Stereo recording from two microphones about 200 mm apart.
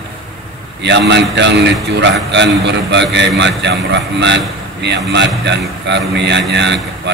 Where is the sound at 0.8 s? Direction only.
60° right (ahead or behind).